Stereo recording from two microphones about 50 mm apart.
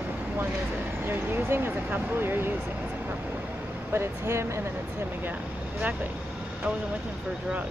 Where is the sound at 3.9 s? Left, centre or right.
Right.